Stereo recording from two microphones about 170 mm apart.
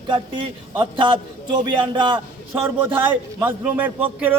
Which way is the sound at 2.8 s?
10° right (ahead or behind).